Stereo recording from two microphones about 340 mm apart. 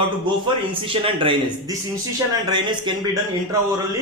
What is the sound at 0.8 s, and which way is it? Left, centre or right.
Speech, centre.